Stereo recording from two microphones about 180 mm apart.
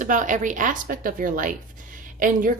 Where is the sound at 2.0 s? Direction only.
45° right (ahead or behind).